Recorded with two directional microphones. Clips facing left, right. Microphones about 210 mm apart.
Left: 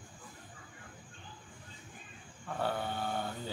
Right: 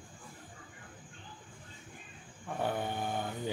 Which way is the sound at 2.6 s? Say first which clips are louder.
Right 1 dB; 15° right (ahead or behind).